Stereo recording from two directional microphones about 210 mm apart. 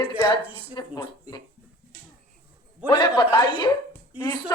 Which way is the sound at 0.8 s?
20° left (ahead or behind).